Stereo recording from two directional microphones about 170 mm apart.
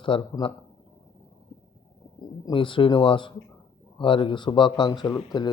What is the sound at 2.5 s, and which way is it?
Speech, 30° left (ahead or behind).